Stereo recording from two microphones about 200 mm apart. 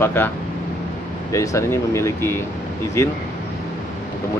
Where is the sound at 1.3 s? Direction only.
15° left (ahead or behind).